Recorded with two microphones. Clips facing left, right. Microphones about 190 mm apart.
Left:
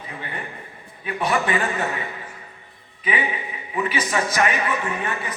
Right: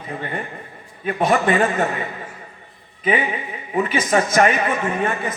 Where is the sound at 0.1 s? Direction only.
45° right (ahead or behind).